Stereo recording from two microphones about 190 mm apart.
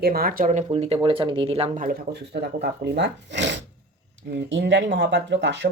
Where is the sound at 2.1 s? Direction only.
60° right (ahead or behind).